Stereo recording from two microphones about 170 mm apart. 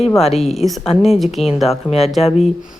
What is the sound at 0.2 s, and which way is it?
Speech, 40° left (ahead or behind).